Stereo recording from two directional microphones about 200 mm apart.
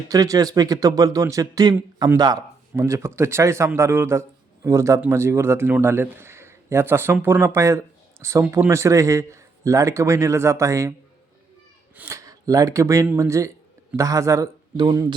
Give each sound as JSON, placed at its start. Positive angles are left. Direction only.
{"t": 0.1, "sound": "speech", "side_deg": -15}
{"t": 11.9, "sound": "speech", "side_deg": -15}